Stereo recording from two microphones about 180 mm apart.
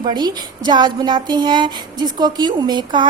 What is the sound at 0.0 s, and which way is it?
A woman's voice, 25° right (ahead or behind).